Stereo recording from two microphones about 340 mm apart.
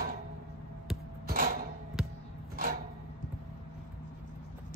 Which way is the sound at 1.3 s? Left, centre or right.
Right.